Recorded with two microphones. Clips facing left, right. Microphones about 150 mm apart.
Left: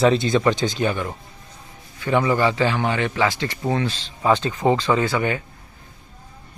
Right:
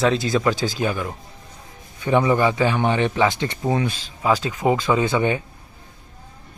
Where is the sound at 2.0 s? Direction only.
20° right (ahead or behind).